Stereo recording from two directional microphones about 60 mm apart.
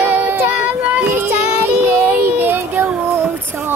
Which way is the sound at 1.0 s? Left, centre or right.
Right.